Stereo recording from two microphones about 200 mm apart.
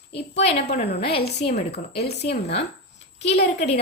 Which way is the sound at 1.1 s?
55° left (ahead or behind).